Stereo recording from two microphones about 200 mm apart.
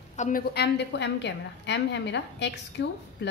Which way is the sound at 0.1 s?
40° left (ahead or behind).